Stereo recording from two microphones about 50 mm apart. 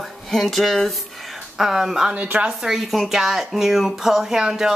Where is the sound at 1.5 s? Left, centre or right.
Centre.